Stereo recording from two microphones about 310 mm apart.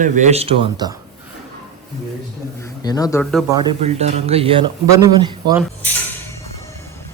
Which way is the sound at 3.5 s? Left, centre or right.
Centre.